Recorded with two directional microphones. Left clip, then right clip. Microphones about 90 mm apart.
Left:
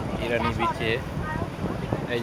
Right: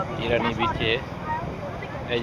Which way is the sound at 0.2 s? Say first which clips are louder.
Right 2 dB; 10° left (ahead or behind).